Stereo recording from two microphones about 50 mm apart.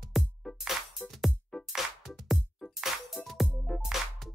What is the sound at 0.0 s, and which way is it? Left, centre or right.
Music, centre.